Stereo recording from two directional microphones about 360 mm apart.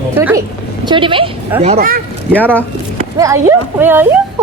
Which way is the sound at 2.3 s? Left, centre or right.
Centre.